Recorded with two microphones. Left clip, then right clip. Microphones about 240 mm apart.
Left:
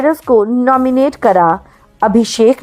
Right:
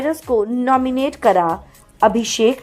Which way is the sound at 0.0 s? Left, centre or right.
Left.